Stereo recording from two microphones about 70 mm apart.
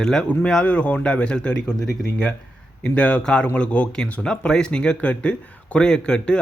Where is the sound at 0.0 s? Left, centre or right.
Centre.